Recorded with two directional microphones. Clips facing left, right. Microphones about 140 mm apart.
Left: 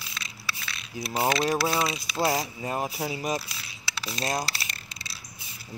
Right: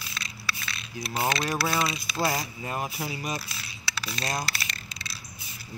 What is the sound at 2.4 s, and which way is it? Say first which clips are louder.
Speech: left 3 dB; 30° left (ahead or behind).